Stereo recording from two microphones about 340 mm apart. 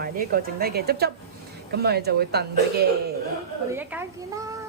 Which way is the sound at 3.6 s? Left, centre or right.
Centre.